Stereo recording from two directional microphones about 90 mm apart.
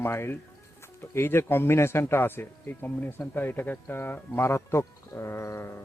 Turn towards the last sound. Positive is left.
turn(degrees=30)  # may be behind; listen again after turning